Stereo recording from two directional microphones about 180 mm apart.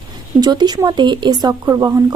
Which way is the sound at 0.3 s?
20° right (ahead or behind).